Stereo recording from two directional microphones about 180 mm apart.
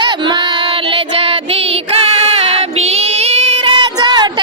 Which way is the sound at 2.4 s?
35° right (ahead or behind).